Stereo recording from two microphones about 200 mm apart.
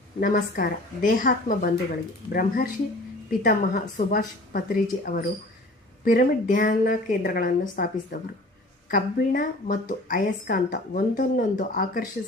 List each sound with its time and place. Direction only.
0.2 s a woman's voice: 45° left (ahead or behind)